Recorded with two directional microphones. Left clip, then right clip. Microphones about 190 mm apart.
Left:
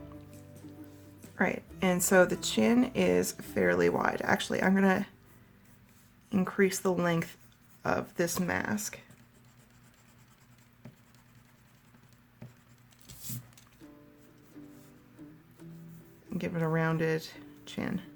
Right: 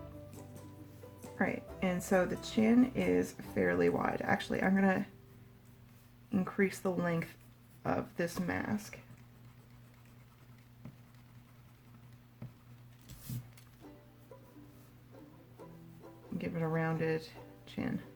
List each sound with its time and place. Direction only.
1.4 s speech: 25° left (ahead or behind)
6.3 s speech: 25° left (ahead or behind)
16.4 s a sound: 25° left (ahead or behind)
17.7 s music: 25° left (ahead or behind)